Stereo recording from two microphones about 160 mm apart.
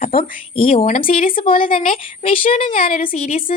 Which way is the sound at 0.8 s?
55° left (ahead or behind).